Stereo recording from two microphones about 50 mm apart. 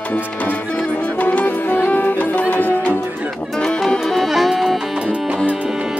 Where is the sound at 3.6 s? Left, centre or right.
Centre.